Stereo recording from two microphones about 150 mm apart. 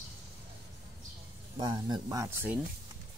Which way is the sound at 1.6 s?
30° right (ahead or behind).